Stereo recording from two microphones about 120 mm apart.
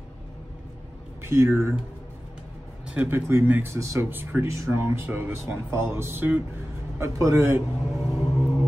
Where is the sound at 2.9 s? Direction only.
15° right (ahead or behind).